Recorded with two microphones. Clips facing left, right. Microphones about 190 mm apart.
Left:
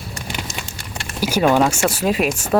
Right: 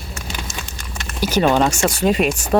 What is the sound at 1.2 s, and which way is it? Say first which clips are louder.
Speech: even; 10° left (ahead or behind).